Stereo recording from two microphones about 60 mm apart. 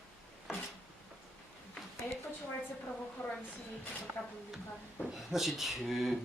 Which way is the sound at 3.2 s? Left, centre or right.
Left.